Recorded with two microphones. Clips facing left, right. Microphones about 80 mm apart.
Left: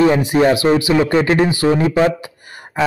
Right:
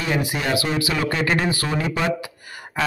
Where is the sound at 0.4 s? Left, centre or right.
Left; by 1.7 s centre.